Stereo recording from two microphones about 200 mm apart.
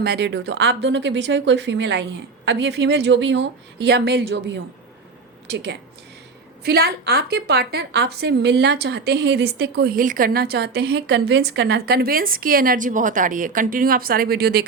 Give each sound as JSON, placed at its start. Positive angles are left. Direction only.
{"t": 0.0, "sound": "a woman's voice", "side_deg": -55}